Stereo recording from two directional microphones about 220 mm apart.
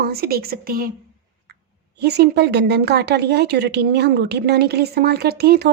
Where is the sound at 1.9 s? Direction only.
50° right (ahead or behind).